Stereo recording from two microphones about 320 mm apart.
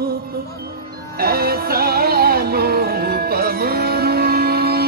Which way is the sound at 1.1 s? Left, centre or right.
Right.